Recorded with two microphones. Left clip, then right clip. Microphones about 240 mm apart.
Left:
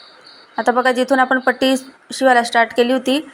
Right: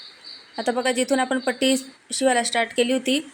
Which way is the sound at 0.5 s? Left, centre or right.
Centre.